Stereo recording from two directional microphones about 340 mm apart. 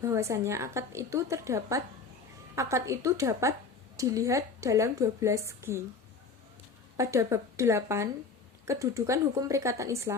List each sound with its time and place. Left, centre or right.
0.0 s a woman's voice: centre
6.9 s a woman's voice: centre